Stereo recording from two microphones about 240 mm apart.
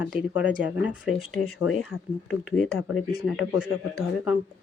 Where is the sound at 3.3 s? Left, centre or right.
Left.